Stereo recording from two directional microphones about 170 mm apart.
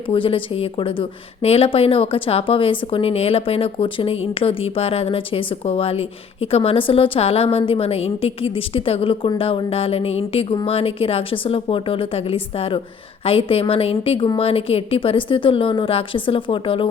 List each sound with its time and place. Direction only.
0.1 s a woman's voice: 30° left (ahead or behind)